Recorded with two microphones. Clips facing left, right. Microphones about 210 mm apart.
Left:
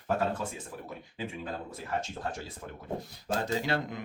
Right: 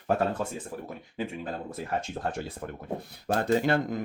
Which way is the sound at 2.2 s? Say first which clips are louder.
Right 4 dB; 55° right (ahead or behind).